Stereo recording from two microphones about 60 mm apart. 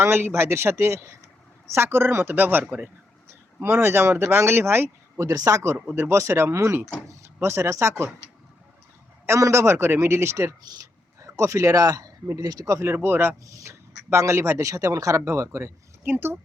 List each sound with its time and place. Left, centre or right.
0.0 s a man's voice: right
3.2 s speech: right
5.2 s speech: right
5.9 s a man's voice: right
9.2 s a man's voice: right
13.4 s speech: right
15.2 s a man's voice: right
16.0 s a woman's voice: right